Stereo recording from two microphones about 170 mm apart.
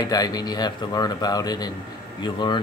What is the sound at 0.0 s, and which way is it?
Speech, 20° left (ahead or behind).